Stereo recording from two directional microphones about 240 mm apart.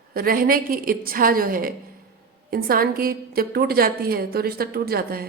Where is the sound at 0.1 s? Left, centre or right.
Right.